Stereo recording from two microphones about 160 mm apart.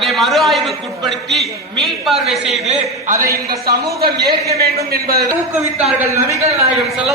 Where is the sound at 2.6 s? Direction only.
45° right (ahead or behind).